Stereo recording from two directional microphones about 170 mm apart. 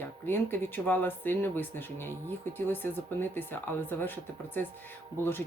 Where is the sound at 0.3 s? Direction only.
10° left (ahead or behind).